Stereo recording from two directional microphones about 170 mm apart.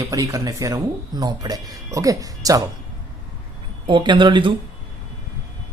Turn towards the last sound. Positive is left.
turn(degrees=-30)  # may be behind; listen again after turning